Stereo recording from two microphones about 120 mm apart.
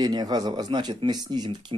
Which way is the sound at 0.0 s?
35° right (ahead or behind).